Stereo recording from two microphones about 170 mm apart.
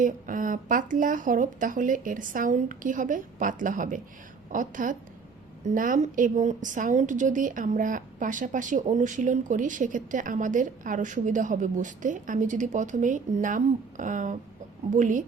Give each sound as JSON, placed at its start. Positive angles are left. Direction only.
{"t": 0.0, "sound": "a woman's voice", "side_deg": -50}